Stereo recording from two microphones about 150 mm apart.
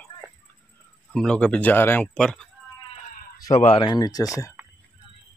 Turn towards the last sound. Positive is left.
turn(degrees=-5)  # may be behind; listen again after turning